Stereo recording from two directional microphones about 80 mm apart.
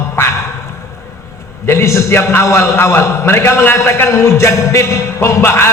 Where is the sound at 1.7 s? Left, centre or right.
Left.